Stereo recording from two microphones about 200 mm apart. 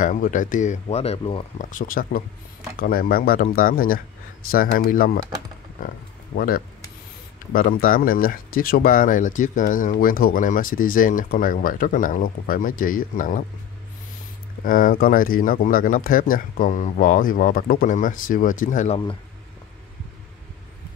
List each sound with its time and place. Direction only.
0.0 s speech: 40° left (ahead or behind)
1.7 s speech: 45° left (ahead or behind)
6.3 s speech: 45° left (ahead or behind)
14.6 s speech: 45° left (ahead or behind)